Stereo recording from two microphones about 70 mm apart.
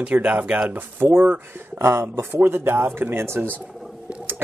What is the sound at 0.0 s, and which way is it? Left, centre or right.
Speech, right.